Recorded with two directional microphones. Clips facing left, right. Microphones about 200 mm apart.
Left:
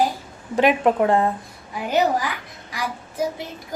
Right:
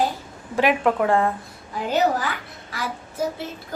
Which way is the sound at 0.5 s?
20° left (ahead or behind).